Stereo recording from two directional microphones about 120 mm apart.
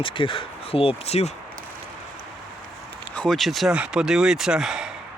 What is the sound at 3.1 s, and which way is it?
Speech, centre (ahead or behind).